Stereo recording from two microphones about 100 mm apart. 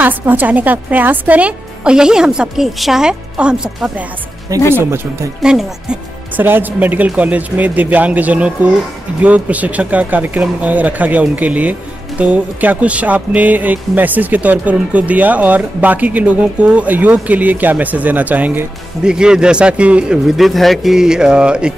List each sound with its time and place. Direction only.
0.0 s speech: 15° right (ahead or behind)
4.7 s speech: 25° right (ahead or behind)
5.4 s speech: 5° right (ahead or behind)
6.3 s speech: 20° right (ahead or behind)